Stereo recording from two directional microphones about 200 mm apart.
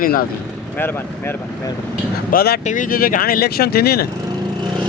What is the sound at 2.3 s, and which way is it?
Speech, 50° left (ahead or behind).